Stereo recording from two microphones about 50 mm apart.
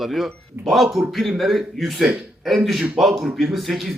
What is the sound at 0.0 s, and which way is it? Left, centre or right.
A man's voice, centre.